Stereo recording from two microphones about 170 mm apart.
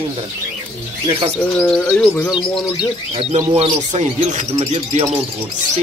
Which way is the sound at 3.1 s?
30° right (ahead or behind).